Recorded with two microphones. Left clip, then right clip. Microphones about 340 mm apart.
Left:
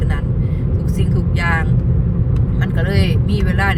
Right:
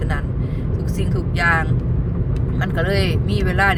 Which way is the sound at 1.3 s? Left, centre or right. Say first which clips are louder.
Right 3 dB; centre.